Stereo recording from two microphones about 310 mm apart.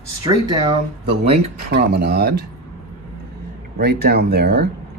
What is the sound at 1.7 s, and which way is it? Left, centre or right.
Speech, right.